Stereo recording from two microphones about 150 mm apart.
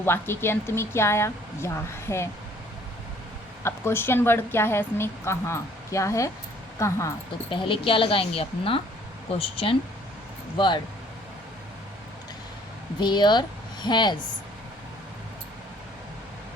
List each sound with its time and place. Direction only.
0.0 s speech: 15° left (ahead or behind)
3.6 s speech: 15° left (ahead or behind)
7.5 s a woman's voice: 35° left (ahead or behind)
13.0 s speech: 30° left (ahead or behind)